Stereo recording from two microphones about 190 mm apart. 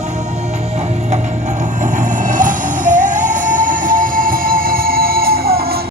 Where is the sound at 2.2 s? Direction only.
45° right (ahead or behind).